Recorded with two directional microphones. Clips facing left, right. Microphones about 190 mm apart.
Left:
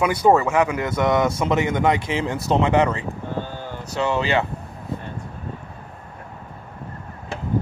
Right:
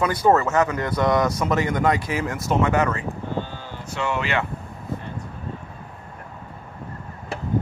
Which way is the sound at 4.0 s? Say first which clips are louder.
Left 4 dB; 30° left (ahead or behind).